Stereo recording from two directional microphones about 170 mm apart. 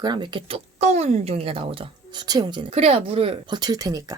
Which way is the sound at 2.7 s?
35° right (ahead or behind).